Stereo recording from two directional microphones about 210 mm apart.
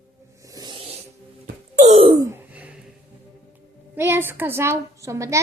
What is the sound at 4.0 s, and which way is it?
A woman's voice, 10° right (ahead or behind).